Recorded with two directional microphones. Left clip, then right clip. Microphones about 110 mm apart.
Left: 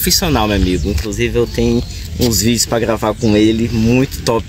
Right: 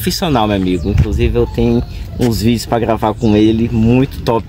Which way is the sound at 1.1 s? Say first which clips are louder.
Even; 40° right (ahead or behind).